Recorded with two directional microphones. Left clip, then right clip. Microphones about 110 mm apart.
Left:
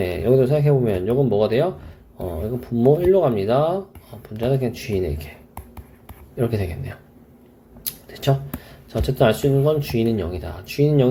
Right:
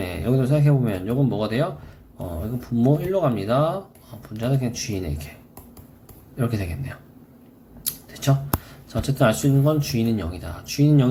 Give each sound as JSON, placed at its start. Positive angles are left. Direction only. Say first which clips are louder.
{"t": 0.0, "sound": "speech", "louder": "left 7 dB", "side_deg": 30}
{"t": 6.3, "sound": "speech", "louder": "left 4 dB", "side_deg": 30}
{"t": 7.9, "sound": "a sound", "louder": "left 3 dB", "side_deg": 30}
{"t": 8.9, "sound": "speech", "louder": "left 3 dB", "side_deg": 30}